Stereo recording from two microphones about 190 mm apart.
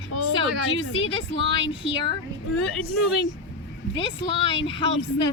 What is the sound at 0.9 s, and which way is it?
Speech, 30° left (ahead or behind).